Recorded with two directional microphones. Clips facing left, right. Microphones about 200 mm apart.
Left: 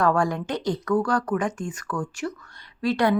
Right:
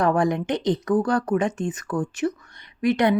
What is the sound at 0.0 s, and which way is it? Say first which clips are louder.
A woman's voice: right 2 dB; 20° right (ahead or behind).